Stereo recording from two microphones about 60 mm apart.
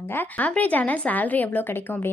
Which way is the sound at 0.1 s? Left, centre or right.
Left.